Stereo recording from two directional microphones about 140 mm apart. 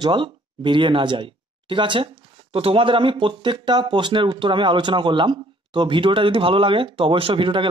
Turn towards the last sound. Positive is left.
turn(degrees=-40)  # may be behind; listen again after turning